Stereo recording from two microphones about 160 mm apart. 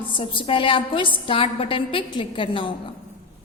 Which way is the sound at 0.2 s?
35° left (ahead or behind).